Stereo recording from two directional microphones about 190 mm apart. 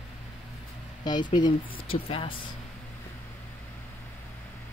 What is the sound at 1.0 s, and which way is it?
Speech, 20° left (ahead or behind).